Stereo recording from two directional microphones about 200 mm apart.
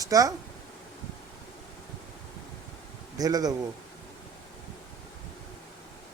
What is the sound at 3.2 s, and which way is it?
Speech, 20° right (ahead or behind).